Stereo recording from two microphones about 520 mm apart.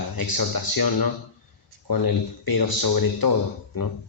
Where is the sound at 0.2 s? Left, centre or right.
Left.